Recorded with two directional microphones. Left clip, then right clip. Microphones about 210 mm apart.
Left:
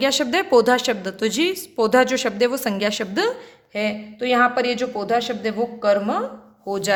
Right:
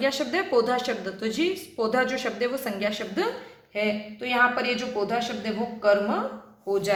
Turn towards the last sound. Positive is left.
turn(degrees=55)  # may be behind; listen again after turning